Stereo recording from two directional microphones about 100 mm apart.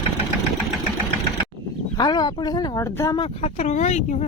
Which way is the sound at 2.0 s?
45° left (ahead or behind).